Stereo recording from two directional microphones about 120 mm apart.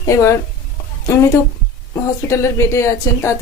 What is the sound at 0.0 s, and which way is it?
A woman's voice, 25° left (ahead or behind).